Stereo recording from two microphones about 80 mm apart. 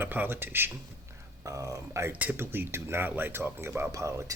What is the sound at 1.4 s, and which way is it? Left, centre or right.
Speech, right.